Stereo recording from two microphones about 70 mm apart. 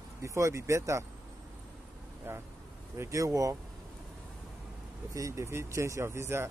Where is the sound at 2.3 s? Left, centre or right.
Right.